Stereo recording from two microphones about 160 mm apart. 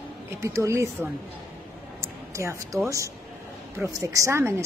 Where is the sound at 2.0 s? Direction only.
15° right (ahead or behind).